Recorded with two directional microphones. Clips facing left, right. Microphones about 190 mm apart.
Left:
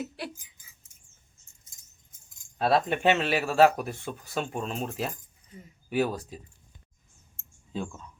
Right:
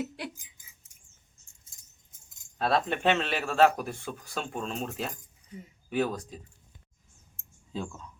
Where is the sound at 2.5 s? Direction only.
5° left (ahead or behind).